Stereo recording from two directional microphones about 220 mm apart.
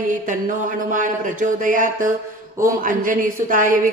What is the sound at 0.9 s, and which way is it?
A woman's voice, 35° right (ahead or behind).